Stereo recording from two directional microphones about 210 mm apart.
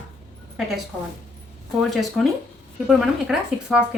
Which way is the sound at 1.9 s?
Centre (ahead or behind).